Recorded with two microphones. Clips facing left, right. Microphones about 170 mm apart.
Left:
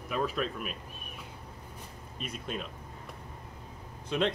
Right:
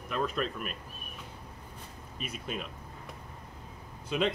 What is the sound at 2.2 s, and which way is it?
Speech, 5° right (ahead or behind).